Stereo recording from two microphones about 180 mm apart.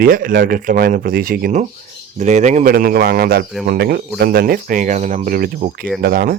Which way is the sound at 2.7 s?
55° right (ahead or behind).